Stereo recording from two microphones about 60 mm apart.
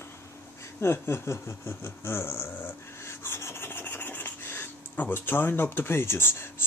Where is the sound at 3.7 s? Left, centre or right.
Left.